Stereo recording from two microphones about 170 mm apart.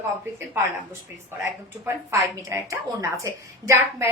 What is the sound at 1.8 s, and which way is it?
A woman's voice, 15° right (ahead or behind).